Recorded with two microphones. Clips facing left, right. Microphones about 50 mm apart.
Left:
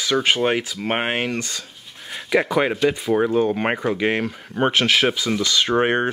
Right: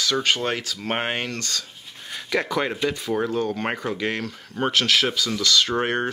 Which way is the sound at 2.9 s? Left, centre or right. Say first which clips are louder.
Left 5 dB; centre.